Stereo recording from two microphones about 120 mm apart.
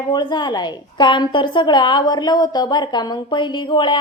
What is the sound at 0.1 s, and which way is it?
A woman's voice, 40° left (ahead or behind).